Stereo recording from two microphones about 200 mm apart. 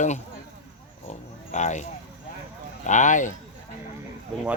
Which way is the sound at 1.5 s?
35° left (ahead or behind).